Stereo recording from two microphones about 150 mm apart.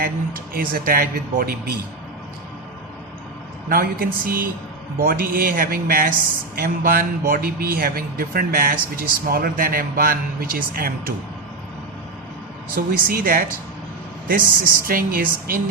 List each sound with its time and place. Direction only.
0.0 s a man's voice: 75° right (ahead or behind)
3.7 s a man's voice: 80° right
12.7 s a man's voice: 80° right
14.8 s speech: 75° right (ahead or behind)